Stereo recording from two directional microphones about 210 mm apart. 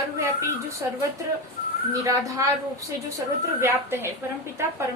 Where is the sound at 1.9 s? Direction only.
15° right (ahead or behind).